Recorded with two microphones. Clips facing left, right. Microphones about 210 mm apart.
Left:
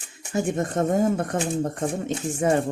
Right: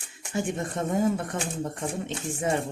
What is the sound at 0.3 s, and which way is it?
Speech, 45° left (ahead or behind).